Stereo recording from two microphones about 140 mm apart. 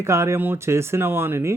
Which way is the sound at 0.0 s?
20° right (ahead or behind).